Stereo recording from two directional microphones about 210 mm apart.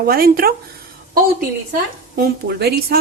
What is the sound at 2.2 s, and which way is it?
Speech, 50° right (ahead or behind).